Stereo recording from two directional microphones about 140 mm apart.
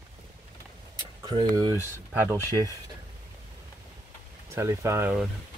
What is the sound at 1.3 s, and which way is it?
Speech, 30° right (ahead or behind).